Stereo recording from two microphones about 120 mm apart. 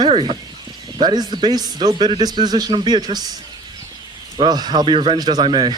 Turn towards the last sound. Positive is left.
turn(degrees=-40)  # may be behind; listen again after turning